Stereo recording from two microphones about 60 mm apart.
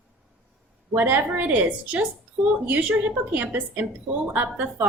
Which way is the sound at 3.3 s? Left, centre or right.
Right.